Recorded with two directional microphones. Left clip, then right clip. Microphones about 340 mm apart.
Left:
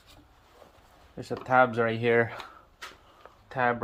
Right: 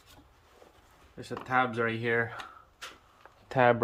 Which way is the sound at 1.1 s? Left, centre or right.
Centre.